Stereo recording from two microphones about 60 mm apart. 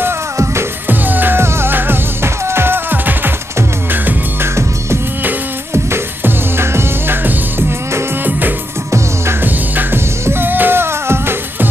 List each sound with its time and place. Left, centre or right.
0.8 s music: right
6.2 s music: right
8.3 s music: right
10.2 s music: right